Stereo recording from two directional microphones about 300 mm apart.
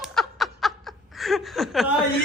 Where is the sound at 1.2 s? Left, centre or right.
Centre.